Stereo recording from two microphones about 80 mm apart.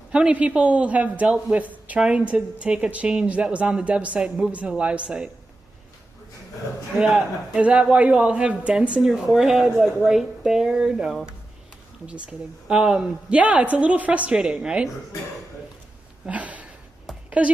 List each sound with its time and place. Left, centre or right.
0.1 s a man's voice: centre
7.0 s a man's voice: centre
16.3 s a sound: centre
17.4 s a man's voice: centre